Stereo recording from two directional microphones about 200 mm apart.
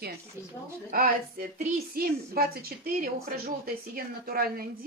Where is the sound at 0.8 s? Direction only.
50° right (ahead or behind).